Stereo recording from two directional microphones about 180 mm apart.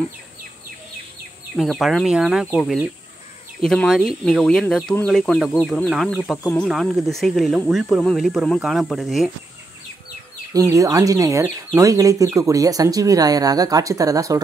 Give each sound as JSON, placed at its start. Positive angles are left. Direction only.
{"t": 1.6, "sound": "speech", "side_deg": 0}
{"t": 10.5, "sound": "speech", "side_deg": -15}